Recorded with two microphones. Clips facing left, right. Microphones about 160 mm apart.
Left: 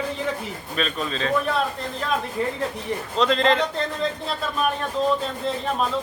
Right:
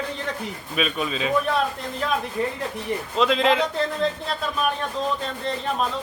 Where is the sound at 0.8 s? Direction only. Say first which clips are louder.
Right 1 dB; 10° right (ahead or behind).